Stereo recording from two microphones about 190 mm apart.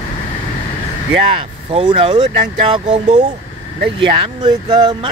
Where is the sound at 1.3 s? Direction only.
30° right (ahead or behind).